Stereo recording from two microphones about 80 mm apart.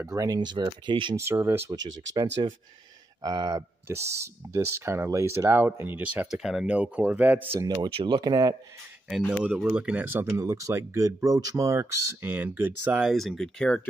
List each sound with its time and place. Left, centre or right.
0.1 s speech: right
1.1 s speech: right
1.7 s speech: right
3.8 s speech: right
6.3 s speech: centre
7.6 s speech: right
9.7 s speech: centre
10.4 s speech: right
13.1 s speech: centre